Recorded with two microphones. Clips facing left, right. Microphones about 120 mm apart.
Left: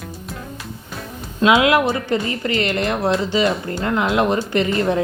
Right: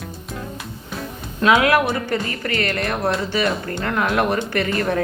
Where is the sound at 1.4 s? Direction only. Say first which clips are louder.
Left 1 dB; 20° left (ahead or behind).